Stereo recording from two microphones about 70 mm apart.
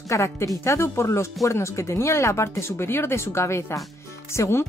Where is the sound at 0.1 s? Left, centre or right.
Left.